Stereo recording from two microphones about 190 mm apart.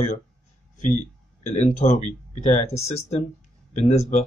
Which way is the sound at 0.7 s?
40° left (ahead or behind).